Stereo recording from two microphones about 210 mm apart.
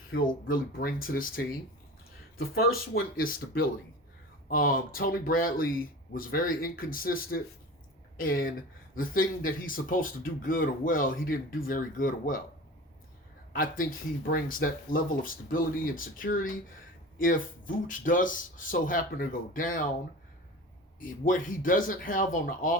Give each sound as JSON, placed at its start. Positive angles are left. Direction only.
{"t": 0.1, "sound": "speech", "side_deg": 50}
{"t": 2.9, "sound": "a woman's voice", "side_deg": 45}
{"t": 13.5, "sound": "speech", "side_deg": 40}
{"t": 21.0, "sound": "speech", "side_deg": 40}